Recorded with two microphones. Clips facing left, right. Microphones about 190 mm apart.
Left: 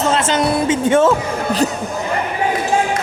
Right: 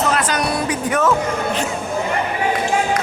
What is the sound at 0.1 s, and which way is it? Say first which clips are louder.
Music: left 4 dB; 25° left (ahead or behind).